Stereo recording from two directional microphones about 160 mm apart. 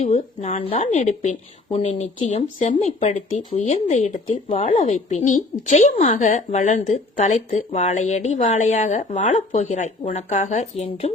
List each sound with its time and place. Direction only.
0.0 s speech: 45° left (ahead or behind)
4.3 s speech: 35° left (ahead or behind)